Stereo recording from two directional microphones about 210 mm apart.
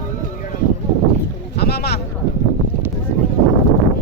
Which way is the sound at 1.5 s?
50° left (ahead or behind).